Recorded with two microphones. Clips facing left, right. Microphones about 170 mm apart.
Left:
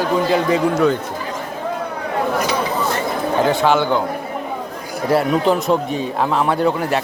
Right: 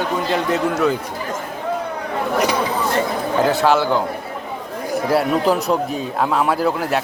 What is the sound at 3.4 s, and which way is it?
Speech, centre (ahead or behind).